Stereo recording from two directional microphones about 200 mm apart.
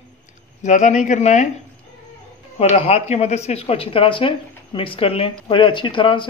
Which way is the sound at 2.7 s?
30° left (ahead or behind).